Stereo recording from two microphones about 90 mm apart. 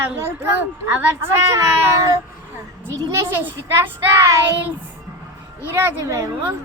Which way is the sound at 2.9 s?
25° right (ahead or behind).